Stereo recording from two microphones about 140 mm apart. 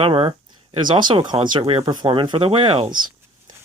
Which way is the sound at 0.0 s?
40° right (ahead or behind).